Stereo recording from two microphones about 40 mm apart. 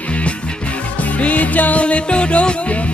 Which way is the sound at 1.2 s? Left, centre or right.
Left.